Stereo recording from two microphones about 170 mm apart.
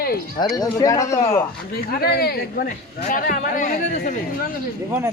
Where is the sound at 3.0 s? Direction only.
50° left (ahead or behind).